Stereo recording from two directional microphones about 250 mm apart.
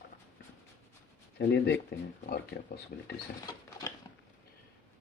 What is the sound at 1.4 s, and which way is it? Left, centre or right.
Speech, left.